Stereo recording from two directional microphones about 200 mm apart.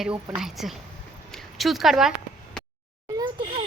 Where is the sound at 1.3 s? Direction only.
Centre (ahead or behind).